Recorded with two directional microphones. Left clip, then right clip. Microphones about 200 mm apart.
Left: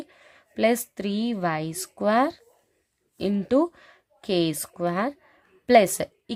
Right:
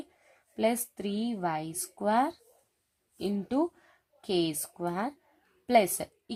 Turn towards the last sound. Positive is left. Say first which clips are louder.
# left 7 dB
turn(degrees=45)  # may be behind; listen again after turning